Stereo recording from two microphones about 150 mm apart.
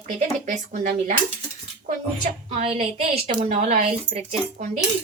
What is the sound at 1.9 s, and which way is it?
A woman's voice, 50° right (ahead or behind).